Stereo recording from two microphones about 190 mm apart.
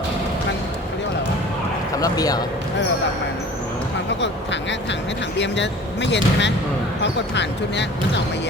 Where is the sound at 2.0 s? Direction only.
20° left (ahead or behind).